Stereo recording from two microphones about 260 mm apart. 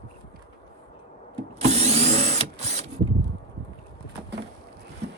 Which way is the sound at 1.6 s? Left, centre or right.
Right.